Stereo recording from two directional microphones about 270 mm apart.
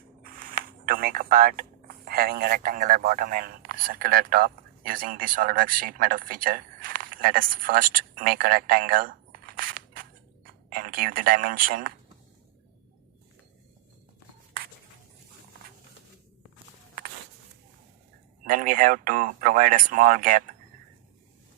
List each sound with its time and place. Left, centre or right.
0.2 s a sound: right
2.0 s a man's voice: right
18.4 s speech: right